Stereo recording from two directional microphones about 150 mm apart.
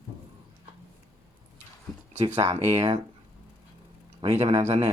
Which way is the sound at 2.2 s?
45° right (ahead or behind).